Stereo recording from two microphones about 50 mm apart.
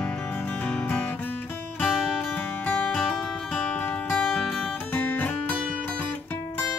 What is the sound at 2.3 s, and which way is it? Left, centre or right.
Music, left.